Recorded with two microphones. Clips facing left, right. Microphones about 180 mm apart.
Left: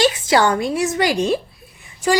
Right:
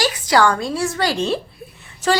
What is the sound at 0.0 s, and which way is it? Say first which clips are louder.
A woman's voice: left 1 dB; 25° left (ahead or behind).